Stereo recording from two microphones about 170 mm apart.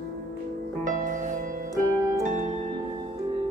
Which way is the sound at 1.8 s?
20° right (ahead or behind).